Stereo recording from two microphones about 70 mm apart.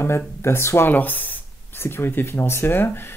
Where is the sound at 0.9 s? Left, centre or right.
Left.